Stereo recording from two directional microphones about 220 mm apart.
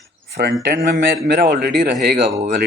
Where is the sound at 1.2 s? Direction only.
45° right (ahead or behind).